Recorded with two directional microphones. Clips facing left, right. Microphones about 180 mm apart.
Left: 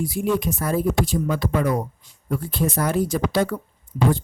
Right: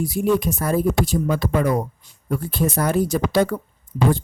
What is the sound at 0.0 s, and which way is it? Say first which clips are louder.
Speech: right 3 dB; 40° right (ahead or behind).